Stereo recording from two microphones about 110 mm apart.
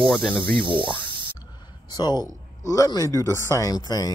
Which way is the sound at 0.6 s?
50° right (ahead or behind).